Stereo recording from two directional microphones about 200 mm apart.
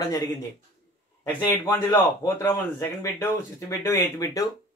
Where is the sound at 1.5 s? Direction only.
10° left (ahead or behind).